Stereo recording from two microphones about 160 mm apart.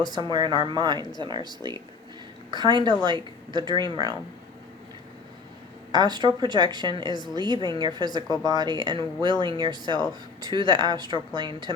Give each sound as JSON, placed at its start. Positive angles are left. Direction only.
{"t": 0.1, "sound": "speech", "side_deg": -25}
{"t": 5.9, "sound": "speech", "side_deg": -25}